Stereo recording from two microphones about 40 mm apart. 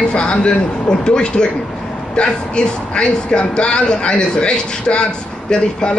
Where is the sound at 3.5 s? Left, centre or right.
Left.